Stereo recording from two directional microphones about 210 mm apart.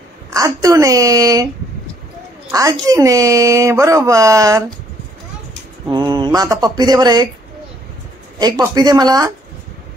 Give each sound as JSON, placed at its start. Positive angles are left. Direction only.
{"t": 0.3, "sound": "speech", "side_deg": -15}
{"t": 2.5, "sound": "speech", "side_deg": -15}
{"t": 5.9, "sound": "speech", "side_deg": -20}
{"t": 8.4, "sound": "speech", "side_deg": -20}